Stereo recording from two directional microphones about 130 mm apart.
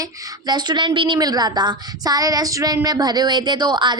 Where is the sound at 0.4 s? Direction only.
35° right (ahead or behind).